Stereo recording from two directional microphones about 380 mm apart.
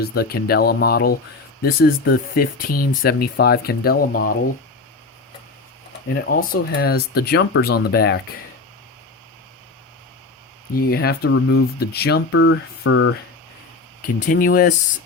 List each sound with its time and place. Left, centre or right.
0.0 s speech: left
6.2 s speech: left
10.8 s speech: left
14.2 s speech: left